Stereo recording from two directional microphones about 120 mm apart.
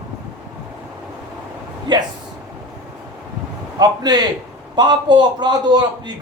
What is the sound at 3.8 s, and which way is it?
A man's voice, 35° right (ahead or behind).